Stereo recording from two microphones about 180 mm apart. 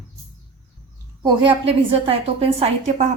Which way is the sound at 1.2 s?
25° right (ahead or behind).